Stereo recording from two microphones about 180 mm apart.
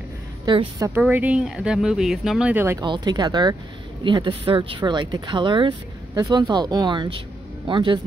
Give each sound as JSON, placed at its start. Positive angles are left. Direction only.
{"t": 0.5, "sound": "speech", "side_deg": -20}
{"t": 1.0, "sound": "speech", "side_deg": -5}
{"t": 2.8, "sound": "speech", "side_deg": -25}